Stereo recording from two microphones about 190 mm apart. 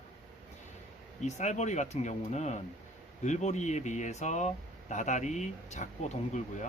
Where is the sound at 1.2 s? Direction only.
40° left (ahead or behind).